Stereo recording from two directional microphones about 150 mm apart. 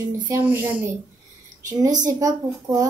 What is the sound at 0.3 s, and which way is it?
Speech, 15° right (ahead or behind).